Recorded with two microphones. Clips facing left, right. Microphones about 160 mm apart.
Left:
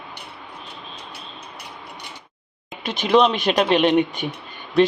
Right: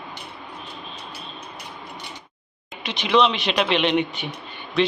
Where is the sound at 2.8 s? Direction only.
45° left (ahead or behind).